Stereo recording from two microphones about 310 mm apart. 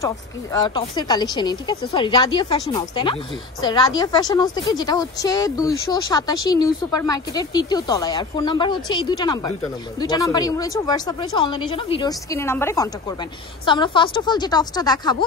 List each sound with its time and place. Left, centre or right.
0.0 s a woman's voice: centre